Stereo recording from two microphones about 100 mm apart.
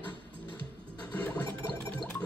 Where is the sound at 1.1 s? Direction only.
15° left (ahead or behind).